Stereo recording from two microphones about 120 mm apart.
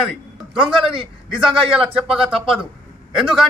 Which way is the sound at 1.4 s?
5° right (ahead or behind).